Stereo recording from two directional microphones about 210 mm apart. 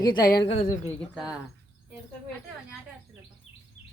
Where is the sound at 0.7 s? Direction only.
10° left (ahead or behind).